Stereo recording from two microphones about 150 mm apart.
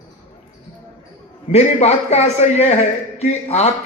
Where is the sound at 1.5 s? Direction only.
45° left (ahead or behind).